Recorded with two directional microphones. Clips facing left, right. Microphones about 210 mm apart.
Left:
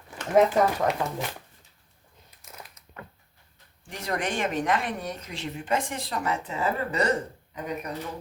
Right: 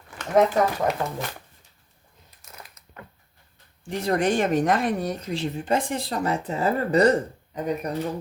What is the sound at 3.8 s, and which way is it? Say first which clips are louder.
Speech: right 8 dB; 30° right (ahead or behind).